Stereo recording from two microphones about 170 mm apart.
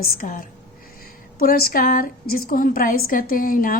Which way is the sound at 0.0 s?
60° left (ahead or behind).